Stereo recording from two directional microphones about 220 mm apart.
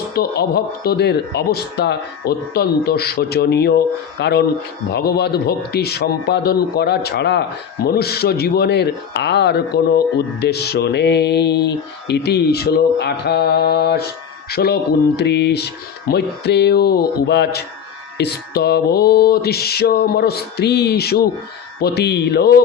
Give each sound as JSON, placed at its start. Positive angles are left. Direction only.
{"t": 0.1, "sound": "speech", "side_deg": 45}